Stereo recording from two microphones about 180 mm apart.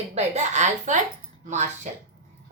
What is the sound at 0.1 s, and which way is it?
Speech, 40° right (ahead or behind).